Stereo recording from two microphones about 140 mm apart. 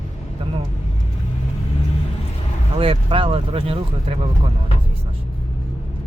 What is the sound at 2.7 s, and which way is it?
Speech, 40° right (ahead or behind).